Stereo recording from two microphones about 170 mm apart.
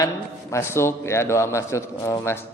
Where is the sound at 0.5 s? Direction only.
15° left (ahead or behind).